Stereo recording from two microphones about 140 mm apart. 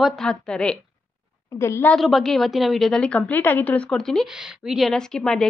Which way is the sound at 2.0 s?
Centre (ahead or behind).